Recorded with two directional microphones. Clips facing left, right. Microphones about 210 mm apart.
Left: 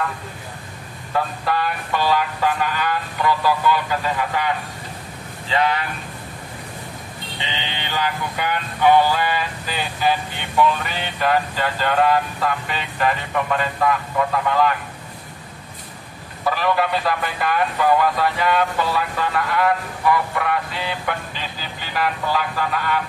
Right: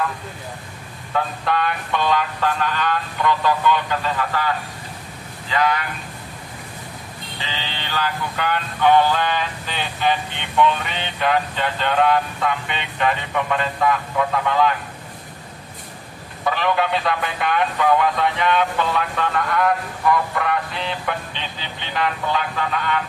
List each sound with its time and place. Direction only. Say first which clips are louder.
1.1 s speech: even; 5° left (ahead or behind)
5.5 s speech: even; 30° left (ahead or behind)
7.5 s speech: left 1 dB; 15° left (ahead or behind)
16.4 s speech: even; centre (ahead or behind)